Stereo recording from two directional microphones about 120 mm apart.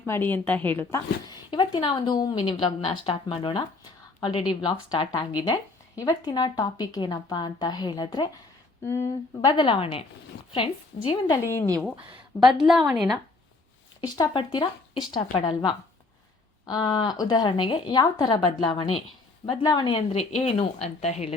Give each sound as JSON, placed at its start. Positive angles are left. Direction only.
{"t": 0.0, "sound": "a woman's voice", "side_deg": 15}
{"t": 1.3, "sound": "a sound", "side_deg": 40}
{"t": 2.4, "sound": "a woman's voice", "side_deg": 55}
{"t": 5.1, "sound": "a woman's voice", "side_deg": 30}
{"t": 8.8, "sound": "speech", "side_deg": 25}
{"t": 9.5, "sound": "a woman's voice", "side_deg": 45}
{"t": 11.3, "sound": "speech", "side_deg": 20}
{"t": 11.9, "sound": "speech", "side_deg": -45}
{"t": 12.5, "sound": "a woman's voice", "side_deg": 0}
{"t": 14.3, "sound": "a woman's voice", "side_deg": 40}
{"t": 16.6, "sound": "a woman's voice", "side_deg": 35}
{"t": 20.1, "sound": "a woman's voice", "side_deg": 60}